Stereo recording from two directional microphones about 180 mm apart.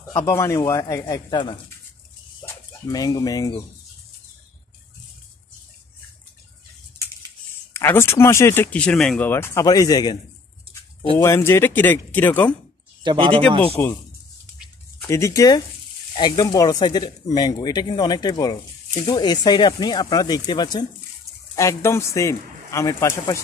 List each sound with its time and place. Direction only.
0.3 s a man's voice: 15° left (ahead or behind)
7.7 s a man's voice: 15° left (ahead or behind)
9.3 s speech: 15° left (ahead or behind)
11.1 s a man's voice: 15° left (ahead or behind)
13.0 s speech: 30° right (ahead or behind)
13.8 s a man's voice: 10° left (ahead or behind)
15.0 s a man's voice: 15° left (ahead or behind)